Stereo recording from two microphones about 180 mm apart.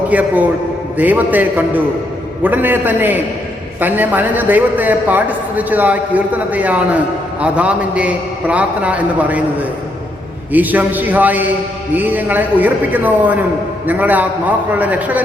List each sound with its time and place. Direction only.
0.1 s a man's voice: 10° right (ahead or behind)